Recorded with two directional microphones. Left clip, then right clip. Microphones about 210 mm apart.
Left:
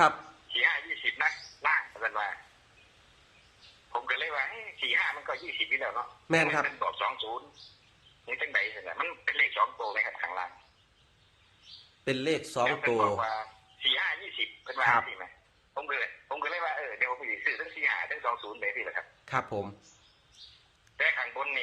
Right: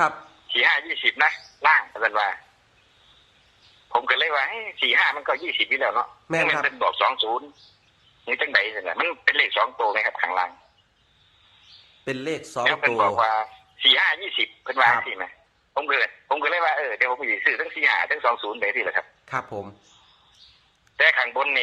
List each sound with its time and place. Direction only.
0.5 s a sound: 50° right (ahead or behind)
3.9 s speech: 50° right (ahead or behind)
6.2 s a man's voice: centre (ahead or behind)
6.7 s speech: 50° right (ahead or behind)
12.0 s a man's voice: 5° right (ahead or behind)
13.1 s speech: 50° right (ahead or behind)
19.2 s a man's voice: 5° right (ahead or behind)
20.9 s speech: 50° right (ahead or behind)